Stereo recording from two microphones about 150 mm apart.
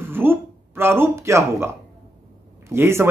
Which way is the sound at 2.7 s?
15° right (ahead or behind).